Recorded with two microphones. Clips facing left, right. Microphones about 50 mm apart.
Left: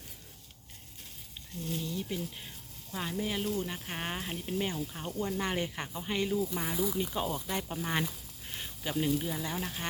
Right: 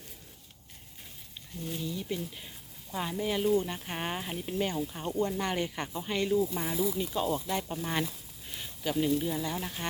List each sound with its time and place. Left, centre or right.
1.8 s speech: centre
5.4 s speech: centre
7.0 s speech: left
7.3 s speech: centre
8.4 s a sound: left
8.8 s speech: centre